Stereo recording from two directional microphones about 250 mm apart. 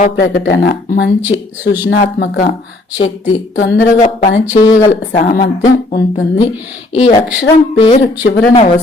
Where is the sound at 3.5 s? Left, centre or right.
Left.